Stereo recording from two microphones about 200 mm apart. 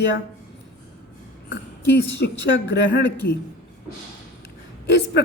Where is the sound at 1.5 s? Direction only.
60° left (ahead or behind).